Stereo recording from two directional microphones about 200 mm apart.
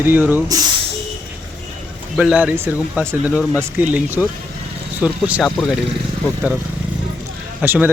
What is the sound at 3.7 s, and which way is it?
Speech, 10° right (ahead or behind).